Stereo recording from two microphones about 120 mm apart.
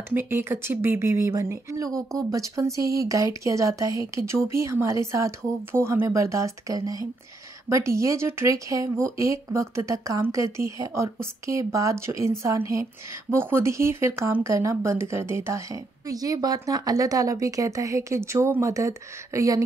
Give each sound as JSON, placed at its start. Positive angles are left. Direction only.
{"t": 0.1, "sound": "speech", "side_deg": -20}